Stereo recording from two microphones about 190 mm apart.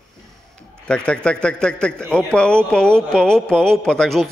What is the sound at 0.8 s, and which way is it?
A man's voice, 5° left (ahead or behind).